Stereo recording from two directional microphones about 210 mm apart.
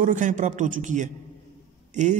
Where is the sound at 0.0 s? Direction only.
35° right (ahead or behind).